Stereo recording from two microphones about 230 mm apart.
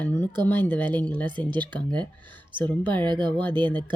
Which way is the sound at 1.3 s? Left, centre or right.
Centre.